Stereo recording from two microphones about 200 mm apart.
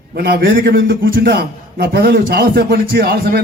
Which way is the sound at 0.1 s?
50° right (ahead or behind).